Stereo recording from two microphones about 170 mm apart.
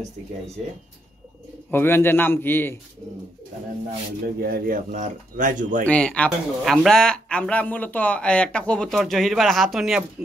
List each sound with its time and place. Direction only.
1.7 s a man's voice: 15° left (ahead or behind)
4.4 s speech: 65° right (ahead or behind)
5.9 s a man's voice: 5° left (ahead or behind)